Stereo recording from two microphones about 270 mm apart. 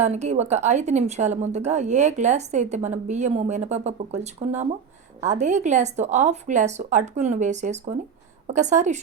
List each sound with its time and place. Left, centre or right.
0.0 s a woman's voice: right